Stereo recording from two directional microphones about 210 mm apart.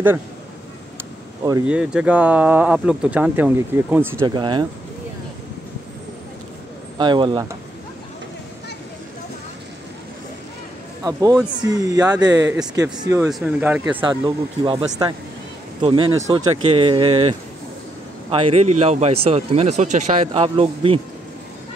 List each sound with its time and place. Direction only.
1.7 s speech: 5° right (ahead or behind)
4.3 s speech: 20° right (ahead or behind)
7.0 s speech: 20° right (ahead or behind)
11.1 s speech: 15° right (ahead or behind)
13.3 s speech: 5° right (ahead or behind)
14.0 s speech: 20° right (ahead or behind)